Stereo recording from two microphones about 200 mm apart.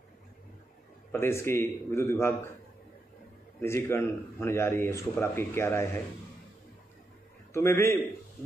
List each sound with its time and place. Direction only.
1.1 s a man's voice: 10° left (ahead or behind)
3.6 s a man's voice: 15° left (ahead or behind)
7.5 s a man's voice: 10° left (ahead or behind)